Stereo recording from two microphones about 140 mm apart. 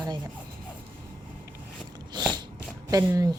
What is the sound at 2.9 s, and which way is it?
Speech, 25° right (ahead or behind).